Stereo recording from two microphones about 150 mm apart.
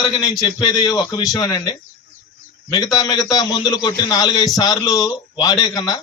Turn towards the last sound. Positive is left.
turn(degrees=25)  # may be behind; listen again after turning